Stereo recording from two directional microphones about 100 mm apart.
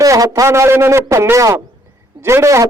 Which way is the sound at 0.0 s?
35° right (ahead or behind).